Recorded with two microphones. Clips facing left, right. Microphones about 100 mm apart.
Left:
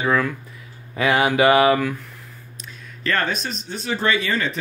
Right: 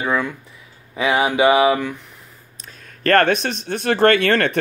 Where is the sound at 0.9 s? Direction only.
20° right (ahead or behind).